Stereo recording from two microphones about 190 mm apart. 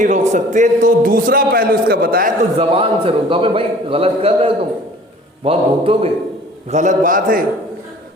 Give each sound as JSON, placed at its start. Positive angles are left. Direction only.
{"t": 0.0, "sound": "a man's voice", "side_deg": -40}
{"t": 2.6, "sound": "a man's voice", "side_deg": -30}